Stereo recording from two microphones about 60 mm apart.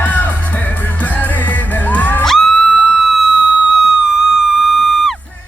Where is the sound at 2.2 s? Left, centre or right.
Centre.